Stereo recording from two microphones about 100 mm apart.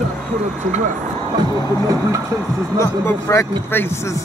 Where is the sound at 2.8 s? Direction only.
25° left (ahead or behind).